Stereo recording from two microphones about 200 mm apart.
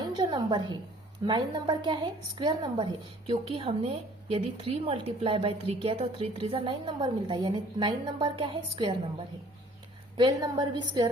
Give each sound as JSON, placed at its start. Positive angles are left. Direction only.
{"t": 0.0, "sound": "a woman's voice", "side_deg": -20}